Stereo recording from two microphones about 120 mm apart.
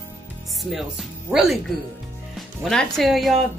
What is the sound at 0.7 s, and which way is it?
Speech, 5° right (ahead or behind).